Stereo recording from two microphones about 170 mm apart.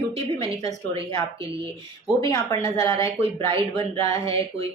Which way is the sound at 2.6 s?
35° right (ahead or behind).